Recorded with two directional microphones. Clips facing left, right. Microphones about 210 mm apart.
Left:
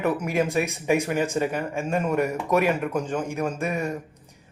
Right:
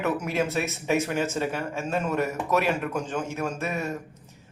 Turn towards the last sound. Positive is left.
turn(degrees=15)  # may be behind; listen again after turning